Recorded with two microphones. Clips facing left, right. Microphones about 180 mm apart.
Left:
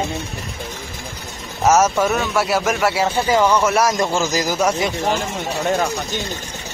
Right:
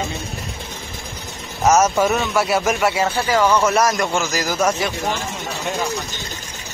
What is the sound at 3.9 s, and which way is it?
A man's voice, 25° left (ahead or behind).